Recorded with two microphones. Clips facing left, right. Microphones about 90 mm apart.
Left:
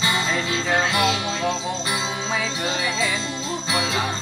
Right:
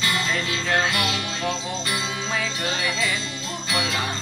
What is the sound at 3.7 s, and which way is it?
Jingle bell, 25° left (ahead or behind).